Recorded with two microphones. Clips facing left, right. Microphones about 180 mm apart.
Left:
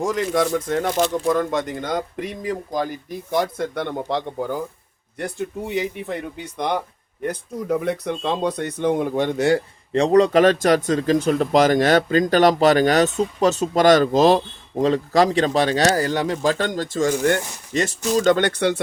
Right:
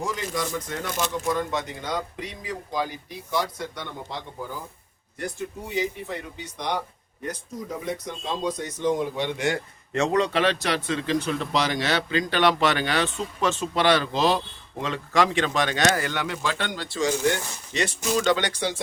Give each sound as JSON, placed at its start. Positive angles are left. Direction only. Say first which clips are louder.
{"t": 0.0, "sound": "speech", "louder": "left 8 dB", "side_deg": 50}